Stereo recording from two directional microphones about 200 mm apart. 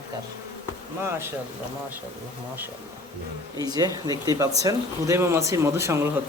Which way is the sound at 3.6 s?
20° right (ahead or behind).